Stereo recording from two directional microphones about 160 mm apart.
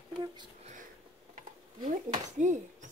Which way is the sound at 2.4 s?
50° right (ahead or behind).